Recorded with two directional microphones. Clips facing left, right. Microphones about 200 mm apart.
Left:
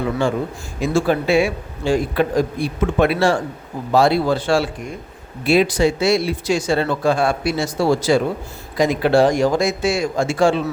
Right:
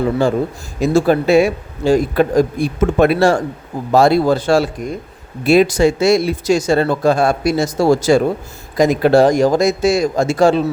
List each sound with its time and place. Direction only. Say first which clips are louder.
0.0 s a man's voice: right 4 dB; 35° right (ahead or behind)